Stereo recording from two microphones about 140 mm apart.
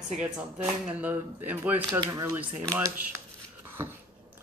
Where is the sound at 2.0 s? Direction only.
25° right (ahead or behind).